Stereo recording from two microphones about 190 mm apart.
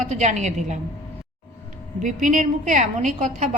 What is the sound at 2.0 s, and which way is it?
A woman's voice, 40° right (ahead or behind).